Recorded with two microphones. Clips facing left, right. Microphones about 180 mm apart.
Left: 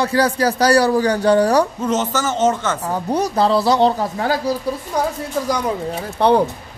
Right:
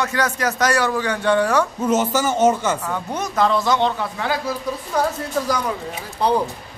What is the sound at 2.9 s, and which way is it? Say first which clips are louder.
A man's voice: left 6 dB; 35° left (ahead or behind).